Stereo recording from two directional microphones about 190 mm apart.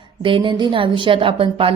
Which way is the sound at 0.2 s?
25° right (ahead or behind).